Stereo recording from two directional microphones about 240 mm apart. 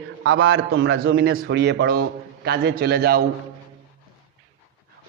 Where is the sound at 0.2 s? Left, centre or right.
Right.